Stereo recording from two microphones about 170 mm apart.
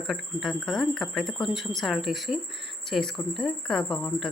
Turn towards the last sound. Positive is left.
turn(degrees=5)  # may be behind; listen again after turning